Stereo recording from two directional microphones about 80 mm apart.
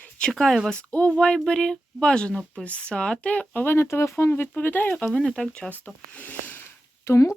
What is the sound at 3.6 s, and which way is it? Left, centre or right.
Speech, left.